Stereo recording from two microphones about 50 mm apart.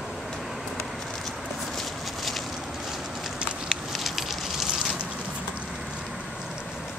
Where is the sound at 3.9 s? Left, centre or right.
Centre.